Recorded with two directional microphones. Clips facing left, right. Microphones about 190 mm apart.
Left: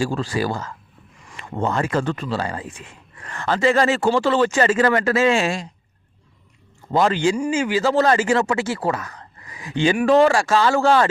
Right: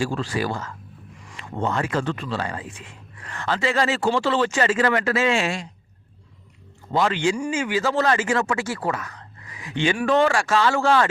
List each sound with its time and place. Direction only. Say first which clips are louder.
0.0 s speech: left 2 dB; 40° left (ahead or behind)
6.9 s speech: left 3 dB; 40° left (ahead or behind)
7.3 s speech: left 3 dB; 25° left (ahead or behind)